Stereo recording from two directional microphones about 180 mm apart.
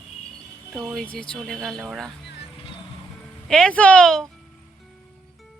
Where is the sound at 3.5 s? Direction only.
5° left (ahead or behind).